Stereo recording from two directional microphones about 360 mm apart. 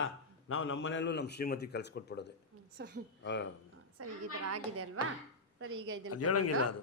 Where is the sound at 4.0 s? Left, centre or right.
Right.